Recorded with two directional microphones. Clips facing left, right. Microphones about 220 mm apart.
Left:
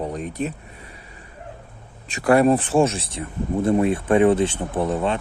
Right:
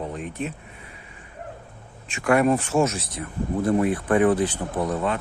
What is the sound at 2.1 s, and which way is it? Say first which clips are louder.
Speech: left 3 dB; 35° left (ahead or behind).